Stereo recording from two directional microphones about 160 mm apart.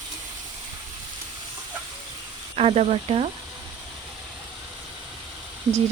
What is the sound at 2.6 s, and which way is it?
Speech, 40° right (ahead or behind).